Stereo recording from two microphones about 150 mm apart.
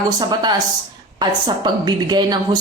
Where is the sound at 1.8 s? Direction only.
30° right (ahead or behind).